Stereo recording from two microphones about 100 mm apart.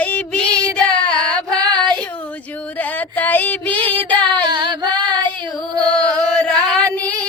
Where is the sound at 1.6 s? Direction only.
45° right (ahead or behind).